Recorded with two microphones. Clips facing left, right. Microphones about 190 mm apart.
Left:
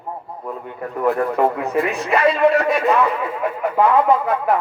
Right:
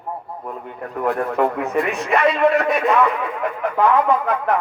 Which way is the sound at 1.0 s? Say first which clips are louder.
Left 2 dB; centre (ahead or behind).